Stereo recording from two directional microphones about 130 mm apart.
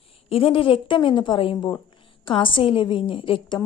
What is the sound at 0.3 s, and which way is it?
A woman's voice, 45° left (ahead or behind).